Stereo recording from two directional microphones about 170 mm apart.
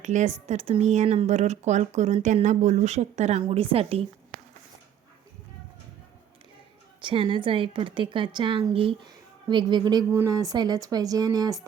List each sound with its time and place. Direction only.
0.0 s speech: 45° right (ahead or behind)
7.0 s a woman's voice: 30° right (ahead or behind)